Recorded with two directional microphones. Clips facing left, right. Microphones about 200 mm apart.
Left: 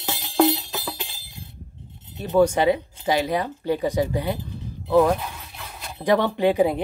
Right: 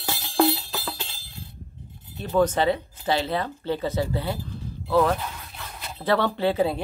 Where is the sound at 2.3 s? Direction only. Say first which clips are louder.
Left 3 dB; 10° left (ahead or behind).